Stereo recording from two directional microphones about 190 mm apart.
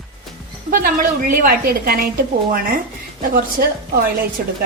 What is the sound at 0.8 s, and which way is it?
A woman's voice, 50° right (ahead or behind).